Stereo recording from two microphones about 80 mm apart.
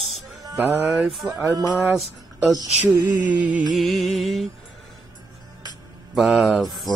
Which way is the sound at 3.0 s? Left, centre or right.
Centre.